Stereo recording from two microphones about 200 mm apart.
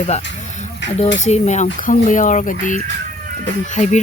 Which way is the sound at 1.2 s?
35° left (ahead or behind).